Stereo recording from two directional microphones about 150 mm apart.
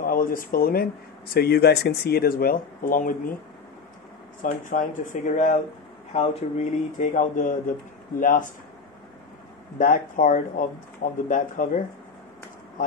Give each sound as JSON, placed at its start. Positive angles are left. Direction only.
{"t": 0.0, "sound": "speech", "side_deg": 70}
{"t": 4.4, "sound": "speech", "side_deg": 60}
{"t": 9.8, "sound": "speech", "side_deg": 60}